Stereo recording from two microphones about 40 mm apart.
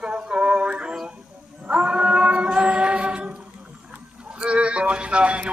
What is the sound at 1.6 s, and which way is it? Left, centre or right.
Chant, right.